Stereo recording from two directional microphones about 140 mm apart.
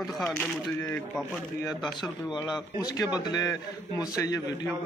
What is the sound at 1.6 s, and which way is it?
A man's voice, 30° left (ahead or behind).